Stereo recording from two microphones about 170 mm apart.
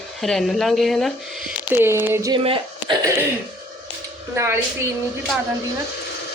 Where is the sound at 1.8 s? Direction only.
10° right (ahead or behind).